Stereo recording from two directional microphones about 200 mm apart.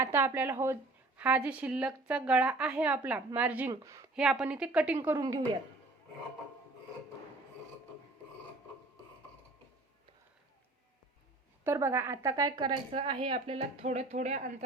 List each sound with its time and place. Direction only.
0.0 s a woman's voice: 10° right (ahead or behind)
4.1 s a woman's voice: 5° right (ahead or behind)
11.6 s speech: 10° right (ahead or behind); by 14.4 s 35° right (ahead or behind)